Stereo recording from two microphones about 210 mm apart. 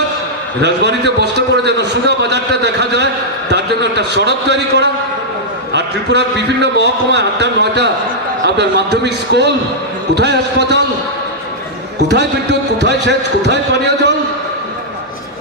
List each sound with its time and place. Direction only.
0.6 s a man's voice: 55° right (ahead or behind)
12.1 s a man's voice: 55° right (ahead or behind)